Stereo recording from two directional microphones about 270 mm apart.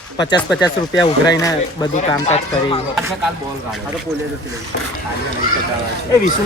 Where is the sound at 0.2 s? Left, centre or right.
Centre.